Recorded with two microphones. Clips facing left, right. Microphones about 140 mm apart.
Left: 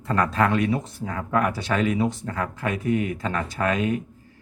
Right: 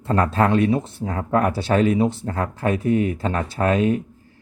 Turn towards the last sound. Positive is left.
turn(degrees=-30)  # may be behind; listen again after turning